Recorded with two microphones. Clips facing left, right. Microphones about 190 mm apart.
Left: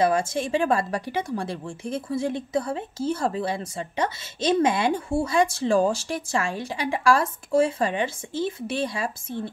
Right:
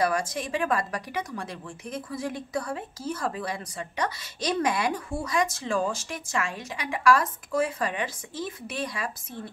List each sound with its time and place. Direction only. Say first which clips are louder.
0.0 s a woman's voice: left 4 dB; 25° left (ahead or behind)